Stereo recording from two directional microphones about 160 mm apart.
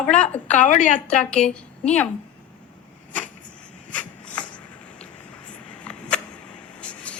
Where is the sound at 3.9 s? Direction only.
10° left (ahead or behind).